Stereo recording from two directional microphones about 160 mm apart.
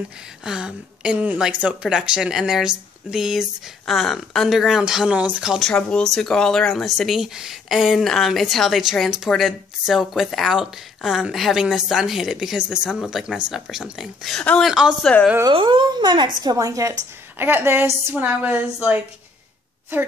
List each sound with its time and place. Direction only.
0.5 s speech: 5° right (ahead or behind)
15.4 s a woman's voice: 30° right (ahead or behind); by 18.9 s 10° right (ahead or behind)